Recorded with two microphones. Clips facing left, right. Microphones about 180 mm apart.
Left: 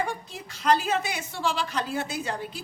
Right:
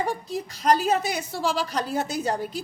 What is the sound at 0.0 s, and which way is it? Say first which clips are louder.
A woman's voice: right 4 dB; 35° right (ahead or behind).